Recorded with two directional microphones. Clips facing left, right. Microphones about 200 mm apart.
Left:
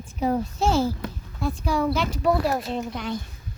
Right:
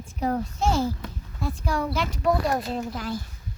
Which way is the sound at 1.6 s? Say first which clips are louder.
Left 3 dB; 5° left (ahead or behind).